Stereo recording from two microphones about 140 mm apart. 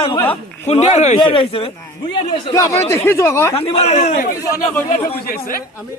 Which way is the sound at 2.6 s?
20° left (ahead or behind).